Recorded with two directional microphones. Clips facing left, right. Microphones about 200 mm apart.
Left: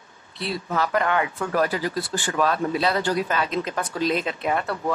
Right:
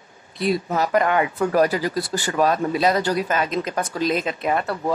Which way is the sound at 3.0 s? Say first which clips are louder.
Right 2 dB; 45° right (ahead or behind).